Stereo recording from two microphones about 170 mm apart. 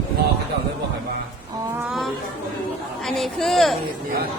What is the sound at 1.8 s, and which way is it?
Chatter, centre (ahead or behind).